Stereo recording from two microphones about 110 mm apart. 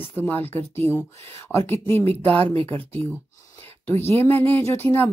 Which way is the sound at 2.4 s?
60° right (ahead or behind).